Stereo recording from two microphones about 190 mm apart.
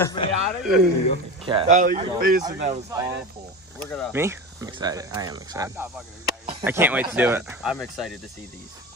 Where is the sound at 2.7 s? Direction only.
20° right (ahead or behind).